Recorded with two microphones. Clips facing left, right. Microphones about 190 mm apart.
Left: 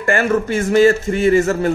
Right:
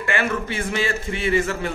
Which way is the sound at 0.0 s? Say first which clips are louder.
Left 7 dB; 45° left (ahead or behind).